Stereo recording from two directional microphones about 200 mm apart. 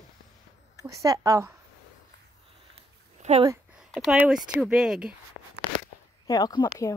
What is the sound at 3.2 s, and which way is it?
Speech, 35° right (ahead or behind).